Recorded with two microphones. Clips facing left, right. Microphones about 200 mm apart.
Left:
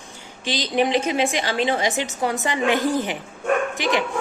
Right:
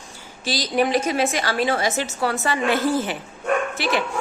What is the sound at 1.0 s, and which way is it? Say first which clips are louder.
A woman's voice: even; 15° left (ahead or behind).